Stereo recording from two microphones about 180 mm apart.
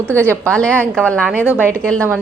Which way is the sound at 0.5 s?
5° left (ahead or behind).